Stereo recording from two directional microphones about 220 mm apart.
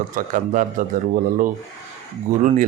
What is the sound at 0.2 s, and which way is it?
Speech, 35° right (ahead or behind).